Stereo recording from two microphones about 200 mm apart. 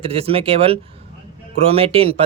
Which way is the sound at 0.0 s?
30° right (ahead or behind).